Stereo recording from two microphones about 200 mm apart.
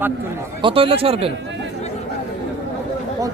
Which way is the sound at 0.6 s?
25° right (ahead or behind).